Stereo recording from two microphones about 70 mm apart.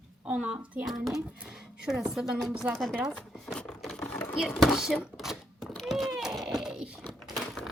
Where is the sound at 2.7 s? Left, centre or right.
Centre.